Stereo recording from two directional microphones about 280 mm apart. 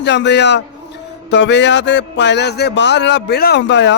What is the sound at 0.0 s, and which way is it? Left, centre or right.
A man's voice, left.